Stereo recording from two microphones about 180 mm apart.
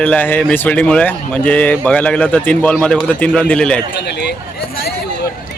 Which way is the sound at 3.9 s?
70° left (ahead or behind).